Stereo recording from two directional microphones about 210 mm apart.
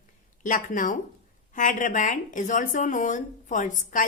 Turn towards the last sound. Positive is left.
turn(degrees=40)  # may be behind; listen again after turning